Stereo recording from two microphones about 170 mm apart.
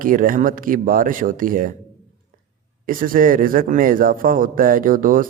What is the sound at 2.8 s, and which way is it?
Speech, 55° right (ahead or behind).